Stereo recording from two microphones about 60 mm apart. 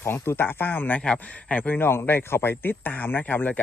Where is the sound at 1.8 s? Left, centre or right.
Left.